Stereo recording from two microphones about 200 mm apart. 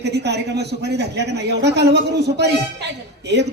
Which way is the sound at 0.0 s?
55° right (ahead or behind).